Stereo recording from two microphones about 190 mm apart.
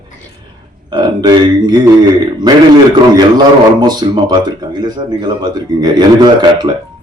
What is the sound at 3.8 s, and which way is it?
Speech, 20° right (ahead or behind).